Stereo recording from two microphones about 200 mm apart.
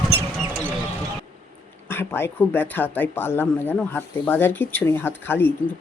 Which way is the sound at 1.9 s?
10° left (ahead or behind).